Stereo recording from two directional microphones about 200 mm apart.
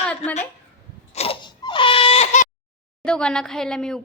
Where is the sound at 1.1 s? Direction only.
30° left (ahead or behind).